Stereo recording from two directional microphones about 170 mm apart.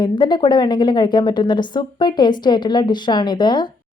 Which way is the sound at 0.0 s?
25° left (ahead or behind).